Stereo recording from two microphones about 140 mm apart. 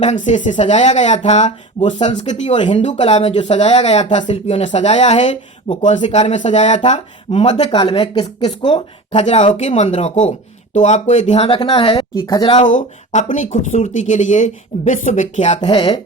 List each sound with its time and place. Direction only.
0.0 s speech: 55° left (ahead or behind)
2.6 s speech: 35° left (ahead or behind)
2.8 s speech: 50° left (ahead or behind)
7.7 s speech: 35° left (ahead or behind)
12.1 s speech: 20° left (ahead or behind)
12.5 s speech: 60° left (ahead or behind)
15.5 s speech: 35° left (ahead or behind)